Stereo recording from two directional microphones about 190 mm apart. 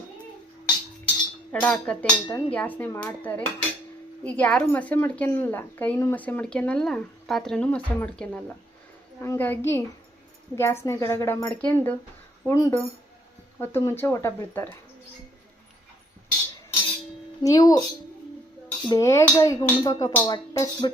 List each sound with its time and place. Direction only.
1.6 s a woman's voice: 5° left (ahead or behind)
17.4 s speech: 20° left (ahead or behind)
18.9 s speech: 15° left (ahead or behind)